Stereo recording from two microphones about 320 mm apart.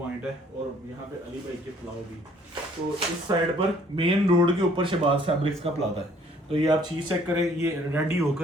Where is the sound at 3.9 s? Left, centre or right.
Centre.